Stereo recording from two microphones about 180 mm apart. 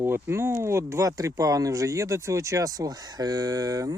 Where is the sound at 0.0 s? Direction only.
15° right (ahead or behind).